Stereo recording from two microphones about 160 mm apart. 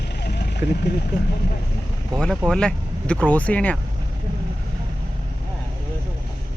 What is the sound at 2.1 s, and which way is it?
Speech, 5° left (ahead or behind).